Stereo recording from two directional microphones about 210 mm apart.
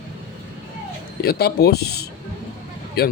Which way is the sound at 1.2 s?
50° left (ahead or behind).